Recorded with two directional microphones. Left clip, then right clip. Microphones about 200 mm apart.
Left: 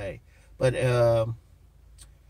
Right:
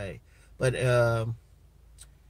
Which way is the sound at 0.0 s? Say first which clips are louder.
Left 3 dB; 15° right (ahead or behind).